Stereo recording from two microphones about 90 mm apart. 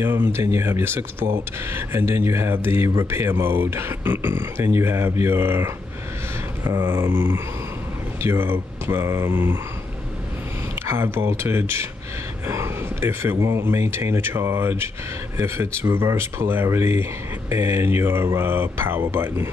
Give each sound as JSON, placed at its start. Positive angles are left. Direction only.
{"t": 0.0, "sound": "speech", "side_deg": -25}
{"t": 6.6, "sound": "a sound", "side_deg": -40}
{"t": 6.9, "sound": "speech", "side_deg": -25}
{"t": 10.9, "sound": "speech", "side_deg": -25}